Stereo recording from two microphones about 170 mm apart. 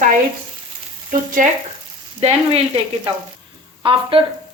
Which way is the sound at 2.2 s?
35° right (ahead or behind).